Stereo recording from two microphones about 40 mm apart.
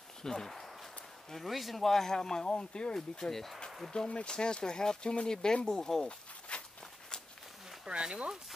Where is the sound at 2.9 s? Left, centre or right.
Centre.